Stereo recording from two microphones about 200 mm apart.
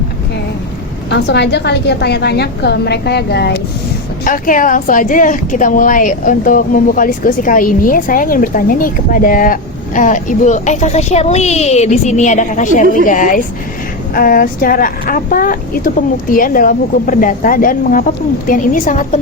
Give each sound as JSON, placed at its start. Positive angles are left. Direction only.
{"t": 1.1, "sound": "a woman's voice", "side_deg": 60}
{"t": 4.2, "sound": "a woman's voice", "side_deg": 40}